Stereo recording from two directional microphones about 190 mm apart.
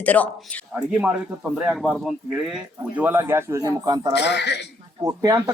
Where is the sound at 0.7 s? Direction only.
10° right (ahead or behind).